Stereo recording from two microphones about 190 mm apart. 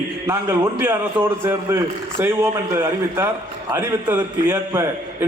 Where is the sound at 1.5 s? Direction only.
10° right (ahead or behind).